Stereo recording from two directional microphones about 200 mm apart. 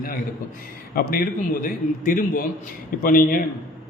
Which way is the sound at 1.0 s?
45° left (ahead or behind).